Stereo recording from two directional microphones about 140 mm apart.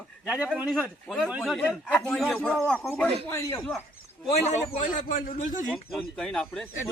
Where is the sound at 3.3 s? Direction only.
20° left (ahead or behind).